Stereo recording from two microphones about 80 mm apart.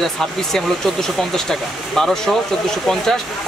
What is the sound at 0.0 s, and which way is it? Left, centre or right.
Speech, centre.